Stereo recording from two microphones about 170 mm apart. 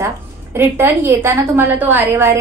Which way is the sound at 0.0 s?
15° right (ahead or behind).